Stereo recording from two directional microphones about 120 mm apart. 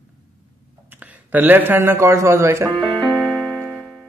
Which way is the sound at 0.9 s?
15° right (ahead or behind).